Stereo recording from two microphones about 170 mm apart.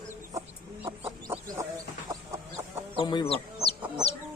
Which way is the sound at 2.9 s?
30° left (ahead or behind).